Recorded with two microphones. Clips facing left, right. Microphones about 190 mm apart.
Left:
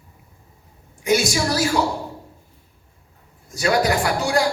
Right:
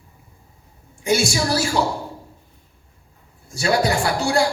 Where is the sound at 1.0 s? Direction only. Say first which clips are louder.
Even; 30° right (ahead or behind).